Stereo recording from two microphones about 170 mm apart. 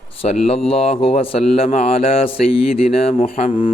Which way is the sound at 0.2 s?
35° left (ahead or behind).